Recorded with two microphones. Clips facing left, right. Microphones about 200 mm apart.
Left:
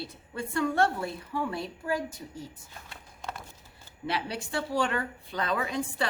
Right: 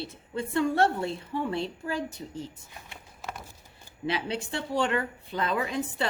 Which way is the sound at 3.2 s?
5° right (ahead or behind).